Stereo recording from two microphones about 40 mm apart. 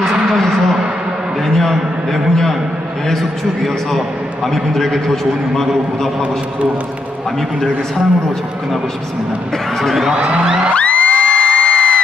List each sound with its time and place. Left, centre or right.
1.4 s a sound: centre
3.1 s a man's voice: centre
9.8 s speech: centre
10.1 s music: right
10.7 s music: left
11.4 s a sound: centre